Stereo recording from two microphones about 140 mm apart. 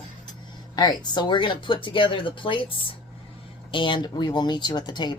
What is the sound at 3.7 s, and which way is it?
Speech, 35° left (ahead or behind).